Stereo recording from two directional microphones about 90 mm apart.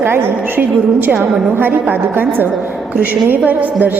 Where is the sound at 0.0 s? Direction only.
25° right (ahead or behind).